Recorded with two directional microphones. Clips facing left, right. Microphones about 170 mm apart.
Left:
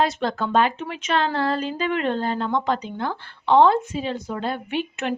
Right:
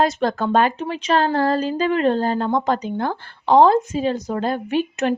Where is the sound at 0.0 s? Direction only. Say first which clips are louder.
Right 3 dB; 45° right (ahead or behind).